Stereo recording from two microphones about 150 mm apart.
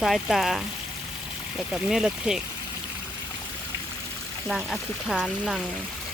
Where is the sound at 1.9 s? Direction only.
5° right (ahead or behind).